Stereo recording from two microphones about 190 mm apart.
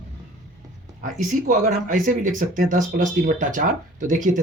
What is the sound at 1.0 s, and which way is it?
Speech, 45° right (ahead or behind).